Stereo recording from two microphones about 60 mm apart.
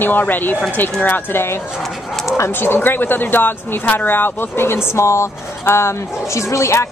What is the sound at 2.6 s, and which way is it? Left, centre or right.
Speech, left.